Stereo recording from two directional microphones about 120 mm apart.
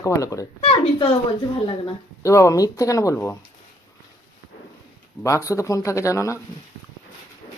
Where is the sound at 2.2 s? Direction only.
25° left (ahead or behind).